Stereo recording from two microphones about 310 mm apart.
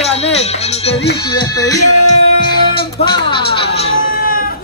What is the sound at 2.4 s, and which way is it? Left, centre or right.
Music, centre.